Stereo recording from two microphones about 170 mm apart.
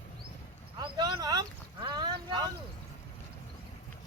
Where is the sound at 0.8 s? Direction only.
25° right (ahead or behind).